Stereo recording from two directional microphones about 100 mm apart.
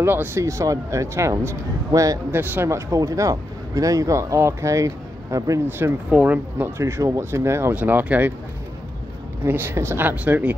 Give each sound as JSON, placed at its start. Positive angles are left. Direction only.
{"t": 0.0, "sound": "speech", "side_deg": -20}
{"t": 2.3, "sound": "speech", "side_deg": -20}
{"t": 6.8, "sound": "speech", "side_deg": -30}
{"t": 7.7, "sound": "speech", "side_deg": -15}
{"t": 9.4, "sound": "speech", "side_deg": -20}